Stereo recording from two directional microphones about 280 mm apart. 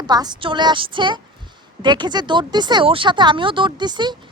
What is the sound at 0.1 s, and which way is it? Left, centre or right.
Speech, centre.